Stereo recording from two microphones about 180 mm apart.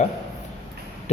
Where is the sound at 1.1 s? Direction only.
35° left (ahead or behind).